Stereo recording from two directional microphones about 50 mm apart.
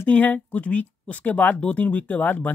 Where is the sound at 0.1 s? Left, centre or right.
Left.